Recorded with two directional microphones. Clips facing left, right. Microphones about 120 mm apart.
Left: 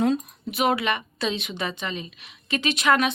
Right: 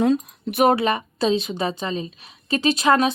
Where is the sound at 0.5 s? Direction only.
40° right (ahead or behind).